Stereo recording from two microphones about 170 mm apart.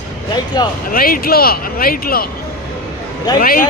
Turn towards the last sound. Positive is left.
turn(degrees=60)  # may be behind; listen again after turning